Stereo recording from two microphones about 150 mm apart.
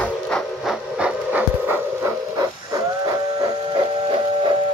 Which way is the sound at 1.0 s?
10° right (ahead or behind).